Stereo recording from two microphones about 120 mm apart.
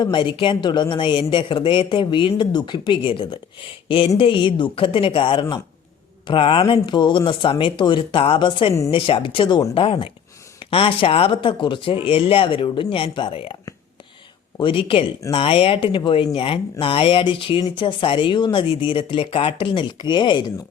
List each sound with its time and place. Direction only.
0.0 s speech: 45° left (ahead or behind)
3.8 s a sound: 45° left (ahead or behind)
4.2 s speech: 45° left (ahead or behind)
14.6 s speech: 45° left (ahead or behind)